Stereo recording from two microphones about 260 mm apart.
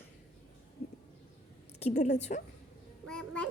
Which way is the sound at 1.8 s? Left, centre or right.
Left.